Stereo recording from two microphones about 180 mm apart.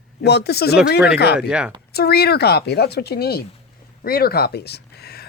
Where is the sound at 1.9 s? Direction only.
60° left (ahead or behind).